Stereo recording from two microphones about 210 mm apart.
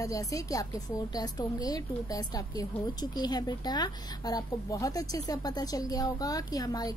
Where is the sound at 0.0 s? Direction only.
15° left (ahead or behind).